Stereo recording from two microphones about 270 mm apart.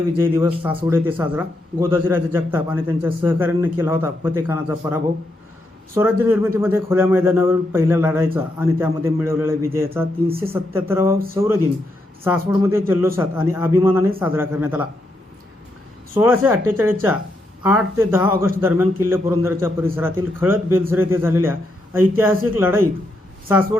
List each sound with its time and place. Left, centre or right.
0.2 s speech: centre
0.7 s speech: centre
0.9 s speech: centre
16.1 s speech: centre